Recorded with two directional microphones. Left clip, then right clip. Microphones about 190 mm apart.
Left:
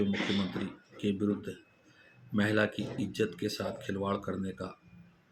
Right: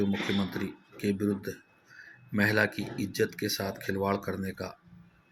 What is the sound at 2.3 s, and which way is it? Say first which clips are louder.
Speech: right 3 dB; 30° right (ahead or behind).